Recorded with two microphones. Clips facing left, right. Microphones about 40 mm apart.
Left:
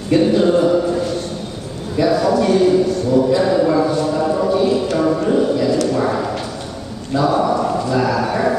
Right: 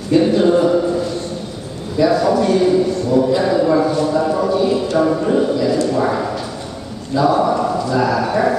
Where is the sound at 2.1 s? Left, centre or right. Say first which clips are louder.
Left 1 dB; centre.